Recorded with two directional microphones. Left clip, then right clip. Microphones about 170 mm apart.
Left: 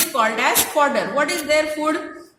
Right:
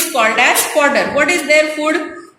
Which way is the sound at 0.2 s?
65° left (ahead or behind).